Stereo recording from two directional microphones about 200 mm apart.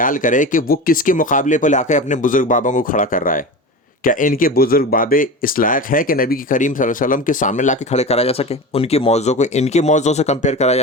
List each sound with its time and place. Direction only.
0.0 s speech: 40° left (ahead or behind)